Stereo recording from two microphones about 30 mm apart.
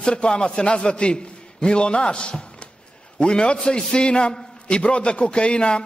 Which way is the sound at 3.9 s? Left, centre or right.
Left.